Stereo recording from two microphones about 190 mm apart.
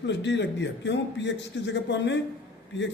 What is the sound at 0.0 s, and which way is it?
A man's voice, 70° left (ahead or behind).